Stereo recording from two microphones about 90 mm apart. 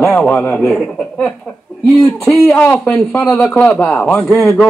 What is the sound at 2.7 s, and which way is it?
Speech, 15° left (ahead or behind).